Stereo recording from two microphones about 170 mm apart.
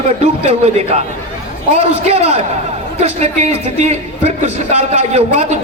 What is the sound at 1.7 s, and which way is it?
A man's voice, 40° right (ahead or behind).